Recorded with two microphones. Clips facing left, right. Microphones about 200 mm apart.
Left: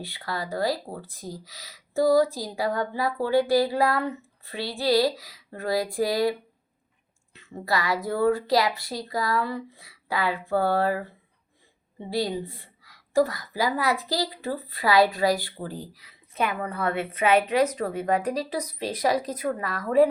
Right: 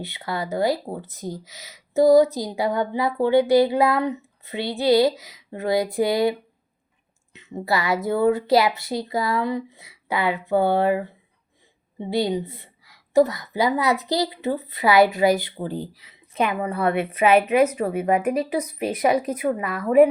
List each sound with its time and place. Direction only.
0.0 s speech: 20° right (ahead or behind)
7.3 s speech: 20° right (ahead or behind)
17.7 s speech: 10° right (ahead or behind)
18.3 s speech: 20° right (ahead or behind)